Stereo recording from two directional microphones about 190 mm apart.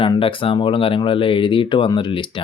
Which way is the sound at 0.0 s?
25° left (ahead or behind).